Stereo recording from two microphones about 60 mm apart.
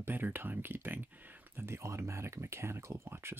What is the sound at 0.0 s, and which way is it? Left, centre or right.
Speech, right.